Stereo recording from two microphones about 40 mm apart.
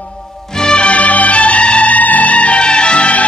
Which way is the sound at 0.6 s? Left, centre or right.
Left.